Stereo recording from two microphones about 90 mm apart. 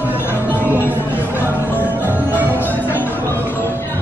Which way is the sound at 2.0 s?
20° right (ahead or behind).